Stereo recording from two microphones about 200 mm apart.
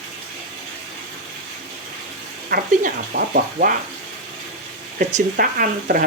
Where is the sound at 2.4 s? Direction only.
45° right (ahead or behind).